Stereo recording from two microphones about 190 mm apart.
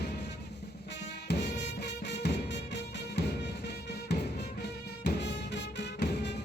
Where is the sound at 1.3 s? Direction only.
65° left (ahead or behind).